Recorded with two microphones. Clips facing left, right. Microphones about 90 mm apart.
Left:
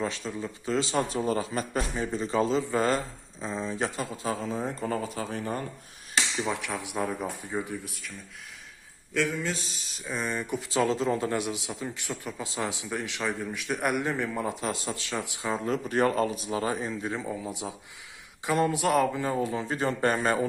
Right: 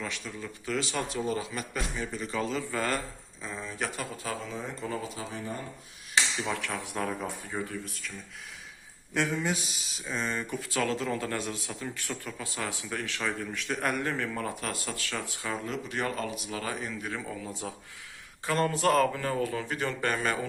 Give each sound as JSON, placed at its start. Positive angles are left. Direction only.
{"t": 0.0, "sound": "a man's voice", "side_deg": 30}
{"t": 4.4, "sound": "speech", "side_deg": 40}
{"t": 6.4, "sound": "speech", "side_deg": 15}
{"t": 9.1, "sound": "speech", "side_deg": -20}
{"t": 9.8, "sound": "a sound", "side_deg": 0}
{"t": 10.1, "sound": "a man's voice", "side_deg": 10}
{"t": 15.6, "sound": "a man's voice", "side_deg": 40}